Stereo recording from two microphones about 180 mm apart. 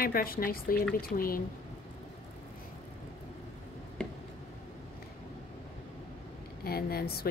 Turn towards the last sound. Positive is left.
turn(degrees=60)  # may be behind; listen again after turning